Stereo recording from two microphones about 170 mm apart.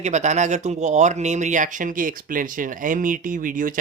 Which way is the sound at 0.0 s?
45° right (ahead or behind).